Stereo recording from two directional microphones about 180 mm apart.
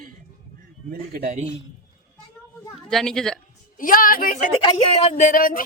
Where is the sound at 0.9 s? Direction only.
55° right (ahead or behind).